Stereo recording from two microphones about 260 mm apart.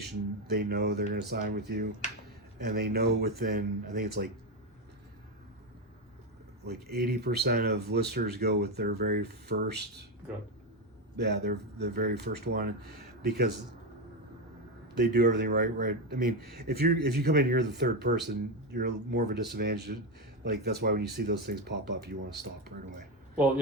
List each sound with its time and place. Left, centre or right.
0.0 s speech: right
6.7 s speech: right
11.2 s speech: right
14.9 s speech: right